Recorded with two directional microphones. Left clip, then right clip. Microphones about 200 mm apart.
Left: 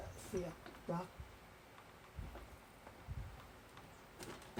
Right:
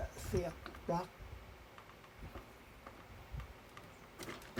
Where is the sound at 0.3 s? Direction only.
35° right (ahead or behind).